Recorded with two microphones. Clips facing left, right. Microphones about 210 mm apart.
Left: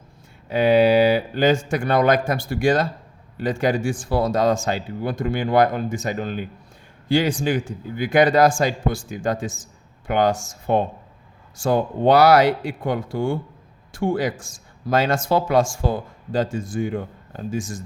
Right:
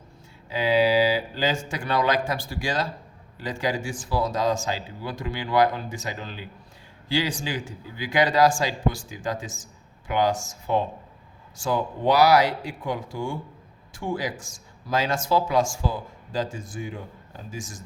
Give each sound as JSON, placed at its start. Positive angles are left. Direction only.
{"t": 0.5, "sound": "speech", "side_deg": 55}